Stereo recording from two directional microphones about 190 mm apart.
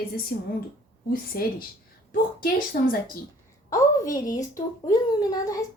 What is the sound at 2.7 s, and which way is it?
Speech, 55° left (ahead or behind).